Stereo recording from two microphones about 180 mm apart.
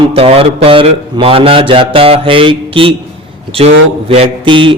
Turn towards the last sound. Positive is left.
turn(degrees=-30)  # may be behind; listen again after turning